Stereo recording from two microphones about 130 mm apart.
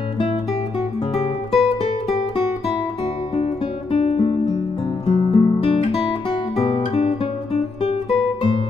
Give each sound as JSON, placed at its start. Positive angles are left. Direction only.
{"t": 1.1, "sound": "music", "side_deg": 45}
{"t": 3.9, "sound": "music", "side_deg": 50}